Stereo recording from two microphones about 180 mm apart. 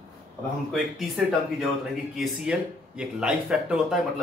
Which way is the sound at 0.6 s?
Centre (ahead or behind).